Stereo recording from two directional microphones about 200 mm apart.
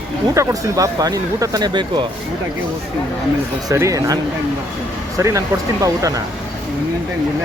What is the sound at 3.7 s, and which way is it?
Speech, 15° right (ahead or behind).